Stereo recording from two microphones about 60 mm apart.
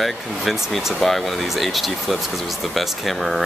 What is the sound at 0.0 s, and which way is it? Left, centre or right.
Speech, centre.